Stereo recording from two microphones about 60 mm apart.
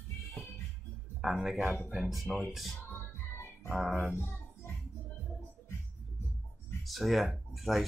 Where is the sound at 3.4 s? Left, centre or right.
Left.